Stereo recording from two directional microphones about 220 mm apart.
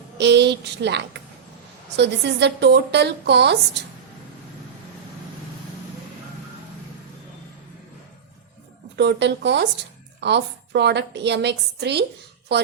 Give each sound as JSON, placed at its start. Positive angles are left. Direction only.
{"t": 0.2, "sound": "a woman's voice", "side_deg": -50}
{"t": 9.0, "sound": "a woman's voice", "side_deg": -50}